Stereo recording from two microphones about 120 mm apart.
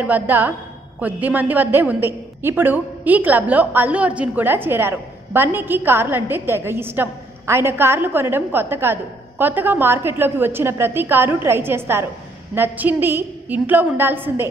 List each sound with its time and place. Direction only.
0.0 s a woman's voice: 15° right (ahead or behind)